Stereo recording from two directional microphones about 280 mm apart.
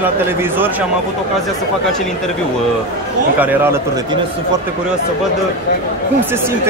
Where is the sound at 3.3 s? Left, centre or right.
Centre.